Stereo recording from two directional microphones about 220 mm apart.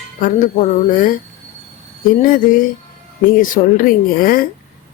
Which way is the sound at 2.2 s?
40° left (ahead or behind).